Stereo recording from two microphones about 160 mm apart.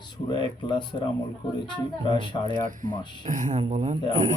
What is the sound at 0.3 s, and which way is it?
Speech, 30° left (ahead or behind).